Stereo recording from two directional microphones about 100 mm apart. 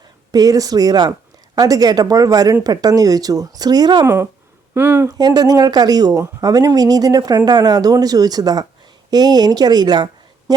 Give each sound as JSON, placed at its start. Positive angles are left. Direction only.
{"t": 0.3, "sound": "speech", "side_deg": -40}
{"t": 4.0, "sound": "speech", "side_deg": -25}
{"t": 5.0, "sound": "speech", "side_deg": -40}